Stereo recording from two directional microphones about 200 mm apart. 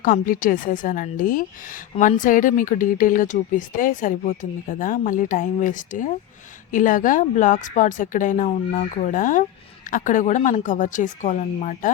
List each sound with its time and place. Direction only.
0.0 s a woman's voice: 45° left (ahead or behind)